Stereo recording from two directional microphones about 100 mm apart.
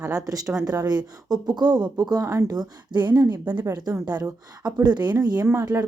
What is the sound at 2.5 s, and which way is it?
Speech, 45° right (ahead or behind).